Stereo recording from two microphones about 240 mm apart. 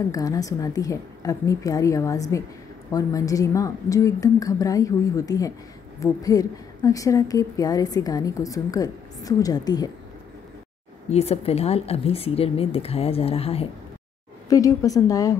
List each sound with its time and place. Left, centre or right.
0.1 s a woman's voice: centre
11.1 s speech: left
14.5 s a woman's voice: centre